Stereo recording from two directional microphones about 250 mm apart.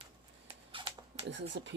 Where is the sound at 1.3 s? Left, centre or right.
Right.